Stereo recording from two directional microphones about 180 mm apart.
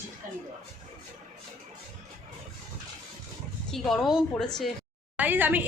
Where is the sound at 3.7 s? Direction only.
Centre (ahead or behind).